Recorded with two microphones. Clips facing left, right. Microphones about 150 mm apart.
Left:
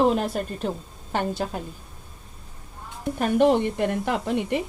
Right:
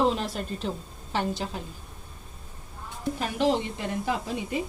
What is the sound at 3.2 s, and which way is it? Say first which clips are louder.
A woman's voice: left 7 dB; 50° left (ahead or behind).